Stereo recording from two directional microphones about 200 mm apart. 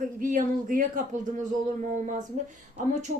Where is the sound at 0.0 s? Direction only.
40° right (ahead or behind).